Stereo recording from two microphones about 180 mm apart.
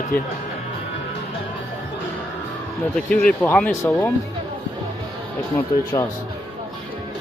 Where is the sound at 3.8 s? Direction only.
20° left (ahead or behind).